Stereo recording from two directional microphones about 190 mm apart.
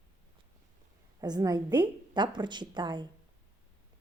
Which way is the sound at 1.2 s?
20° right (ahead or behind).